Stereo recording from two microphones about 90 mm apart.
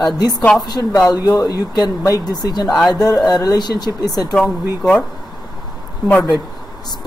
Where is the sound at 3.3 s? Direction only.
45° left (ahead or behind).